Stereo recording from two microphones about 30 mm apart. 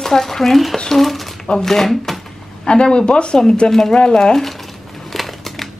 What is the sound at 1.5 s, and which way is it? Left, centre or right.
Speech, centre.